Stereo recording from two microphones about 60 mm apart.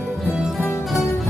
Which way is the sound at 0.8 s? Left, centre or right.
Centre.